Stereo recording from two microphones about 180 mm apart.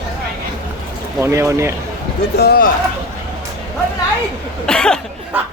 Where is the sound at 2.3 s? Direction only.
60° left (ahead or behind).